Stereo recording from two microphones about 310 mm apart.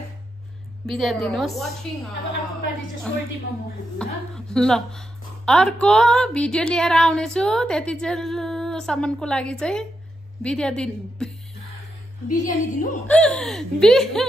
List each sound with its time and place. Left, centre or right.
0.8 s a woman's voice: centre
4.0 s a woman's voice: centre
12.3 s a woman's voice: left
13.0 s a woman's voice: centre